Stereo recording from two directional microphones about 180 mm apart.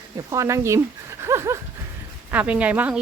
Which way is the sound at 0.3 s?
15° right (ahead or behind).